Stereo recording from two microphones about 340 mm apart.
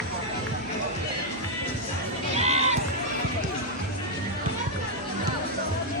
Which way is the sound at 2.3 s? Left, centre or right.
Centre.